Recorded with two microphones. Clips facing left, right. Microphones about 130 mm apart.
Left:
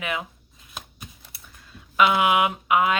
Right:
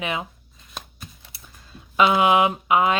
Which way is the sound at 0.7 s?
5° left (ahead or behind).